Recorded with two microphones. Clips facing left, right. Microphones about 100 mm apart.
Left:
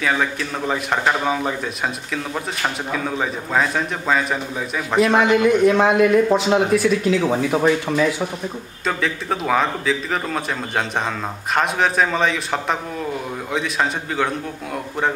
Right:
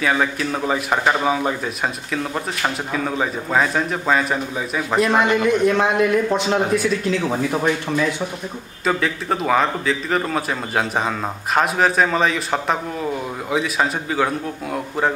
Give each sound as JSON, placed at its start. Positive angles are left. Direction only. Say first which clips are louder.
{"t": 0.0, "sound": "a man's voice", "louder": "right 1 dB", "side_deg": 0}